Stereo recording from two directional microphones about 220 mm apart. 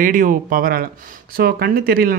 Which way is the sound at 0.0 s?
40° right (ahead or behind).